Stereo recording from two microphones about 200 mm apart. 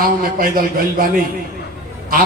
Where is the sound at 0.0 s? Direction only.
45° right (ahead or behind).